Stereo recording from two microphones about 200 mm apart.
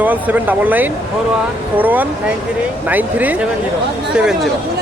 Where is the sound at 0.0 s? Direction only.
10° right (ahead or behind).